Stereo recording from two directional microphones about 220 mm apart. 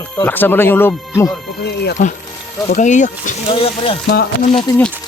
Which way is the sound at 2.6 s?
35° left (ahead or behind).